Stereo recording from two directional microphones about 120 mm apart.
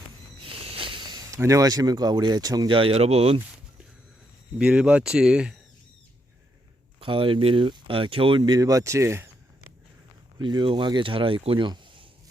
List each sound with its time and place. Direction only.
0.4 s a sound: 50° right (ahead or behind); by 2.7 s 35° right (ahead or behind)
2.7 s speech: 50° right (ahead or behind)
4.5 s speech: 10° right (ahead or behind)
7.0 s speech: 45° right (ahead or behind); by 9.3 s 20° right (ahead or behind)
10.3 s speech: 35° right (ahead or behind)